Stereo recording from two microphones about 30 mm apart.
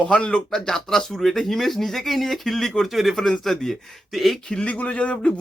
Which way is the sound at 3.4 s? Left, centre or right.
Centre.